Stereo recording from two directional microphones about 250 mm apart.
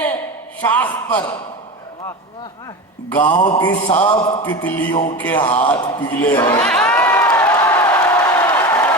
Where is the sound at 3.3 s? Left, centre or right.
Centre.